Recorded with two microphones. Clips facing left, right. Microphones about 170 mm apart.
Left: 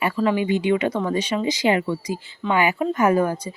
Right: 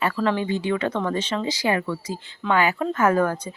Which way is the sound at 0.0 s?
10° left (ahead or behind).